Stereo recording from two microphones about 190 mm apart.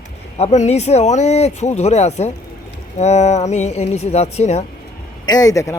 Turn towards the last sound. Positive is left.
turn(degrees=15)  # may be behind; listen again after turning